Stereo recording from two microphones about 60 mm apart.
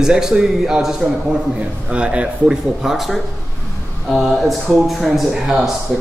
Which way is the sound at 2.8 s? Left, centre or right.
Centre.